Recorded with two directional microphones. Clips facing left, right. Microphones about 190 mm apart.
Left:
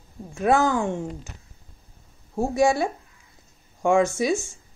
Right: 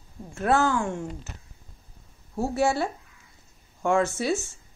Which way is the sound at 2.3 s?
15° left (ahead or behind).